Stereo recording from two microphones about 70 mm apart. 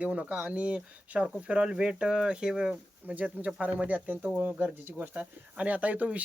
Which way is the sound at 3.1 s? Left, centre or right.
Right.